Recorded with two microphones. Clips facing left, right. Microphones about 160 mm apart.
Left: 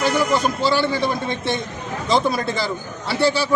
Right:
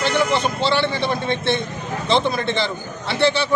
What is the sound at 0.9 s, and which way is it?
Speech, 40° left (ahead or behind).